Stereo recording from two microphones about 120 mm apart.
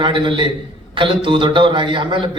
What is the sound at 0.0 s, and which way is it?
A man's voice, 45° right (ahead or behind).